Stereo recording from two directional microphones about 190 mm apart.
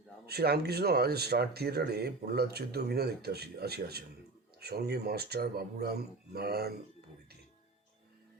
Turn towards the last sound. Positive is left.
turn(degrees=-55)  # may be behind; listen again after turning